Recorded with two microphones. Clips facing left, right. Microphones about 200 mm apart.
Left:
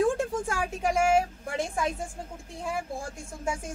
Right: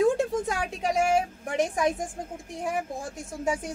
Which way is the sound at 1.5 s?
15° right (ahead or behind).